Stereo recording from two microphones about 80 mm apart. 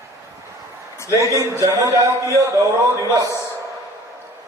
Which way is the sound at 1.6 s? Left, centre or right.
Right.